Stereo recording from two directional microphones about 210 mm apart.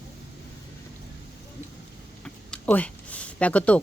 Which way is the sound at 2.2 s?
5° left (ahead or behind).